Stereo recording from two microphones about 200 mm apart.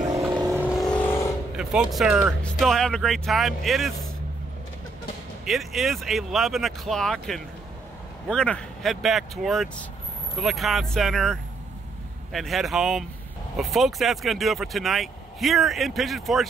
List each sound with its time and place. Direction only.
0.1 s vehicle: 20° right (ahead or behind)
0.5 s vehicle: 5° right (ahead or behind)
1.6 s speech: 5° right (ahead or behind)
5.4 s speech: centre (ahead or behind)